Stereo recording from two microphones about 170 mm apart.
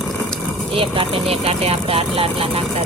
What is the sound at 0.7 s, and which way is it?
Vehicle, 30° right (ahead or behind).